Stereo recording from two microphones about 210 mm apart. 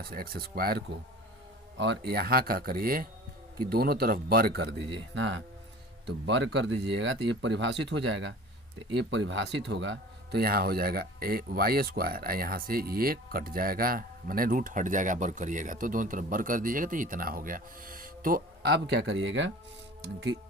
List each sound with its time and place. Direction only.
0.0 s speech: 45° right (ahead or behind)